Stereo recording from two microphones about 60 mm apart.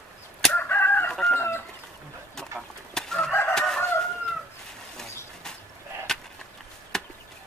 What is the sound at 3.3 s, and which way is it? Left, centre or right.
Chicken, left.